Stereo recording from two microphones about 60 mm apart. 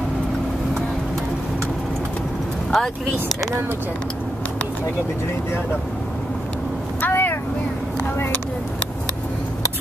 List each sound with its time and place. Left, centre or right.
2.7 s speech: centre
7.0 s vehicle: left